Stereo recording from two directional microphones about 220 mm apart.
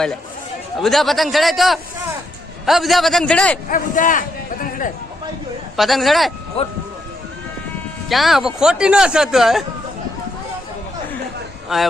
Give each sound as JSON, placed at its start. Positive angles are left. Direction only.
{"t": 0.8, "sound": "speech", "side_deg": 0}
{"t": 3.7, "sound": "speech", "side_deg": 35}
{"t": 5.7, "sound": "speech", "side_deg": 0}
{"t": 8.1, "sound": "speech", "side_deg": 0}
{"t": 11.7, "sound": "speech", "side_deg": 0}